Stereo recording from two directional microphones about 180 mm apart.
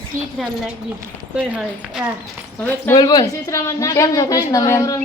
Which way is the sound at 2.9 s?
20° left (ahead or behind).